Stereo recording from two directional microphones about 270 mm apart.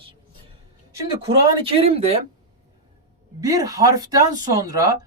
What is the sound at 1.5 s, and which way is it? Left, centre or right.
Speech, right.